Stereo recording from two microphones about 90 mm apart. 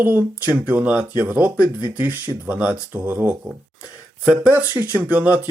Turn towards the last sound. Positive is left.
turn(degrees=-20)  # may be behind; listen again after turning